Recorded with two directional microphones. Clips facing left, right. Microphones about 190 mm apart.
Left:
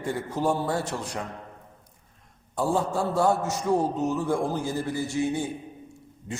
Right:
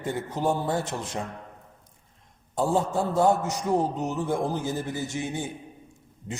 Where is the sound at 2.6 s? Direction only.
20° right (ahead or behind).